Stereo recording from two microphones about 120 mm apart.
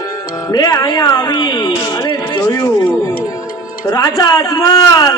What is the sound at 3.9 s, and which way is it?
A man's voice, 30° left (ahead or behind).